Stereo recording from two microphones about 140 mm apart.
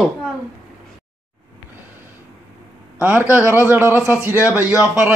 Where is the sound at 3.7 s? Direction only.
15° right (ahead or behind).